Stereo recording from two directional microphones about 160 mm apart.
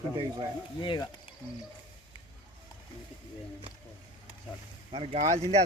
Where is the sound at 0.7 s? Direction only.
30° left (ahead or behind).